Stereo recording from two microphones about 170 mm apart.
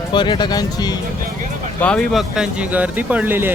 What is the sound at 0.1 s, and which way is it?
Speech, 25° left (ahead or behind).